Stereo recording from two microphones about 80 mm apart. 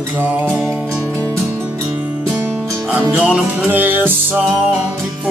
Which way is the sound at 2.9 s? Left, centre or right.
Centre.